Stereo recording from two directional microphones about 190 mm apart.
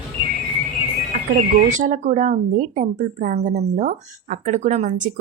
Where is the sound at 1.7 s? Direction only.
40° right (ahead or behind).